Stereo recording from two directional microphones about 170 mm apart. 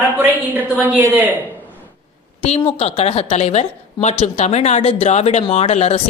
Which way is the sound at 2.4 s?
40° left (ahead or behind).